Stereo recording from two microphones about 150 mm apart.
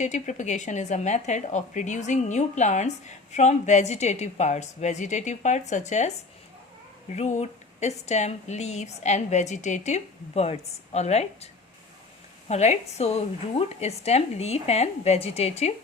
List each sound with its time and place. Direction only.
0.0 s speech: 50° left (ahead or behind)
12.5 s speech: 45° left (ahead or behind)